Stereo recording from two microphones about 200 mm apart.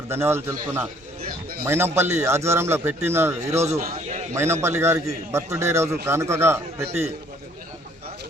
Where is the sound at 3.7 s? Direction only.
35° right (ahead or behind).